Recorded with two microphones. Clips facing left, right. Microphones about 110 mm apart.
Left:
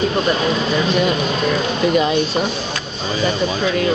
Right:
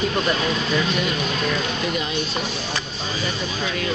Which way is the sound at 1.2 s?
25° left (ahead or behind).